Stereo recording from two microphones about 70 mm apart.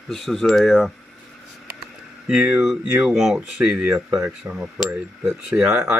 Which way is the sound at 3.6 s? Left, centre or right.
Centre.